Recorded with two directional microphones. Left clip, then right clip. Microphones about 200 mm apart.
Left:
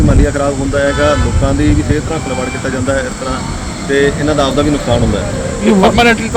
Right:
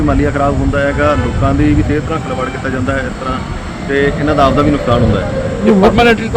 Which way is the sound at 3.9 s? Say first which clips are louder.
Even; centre (ahead or behind).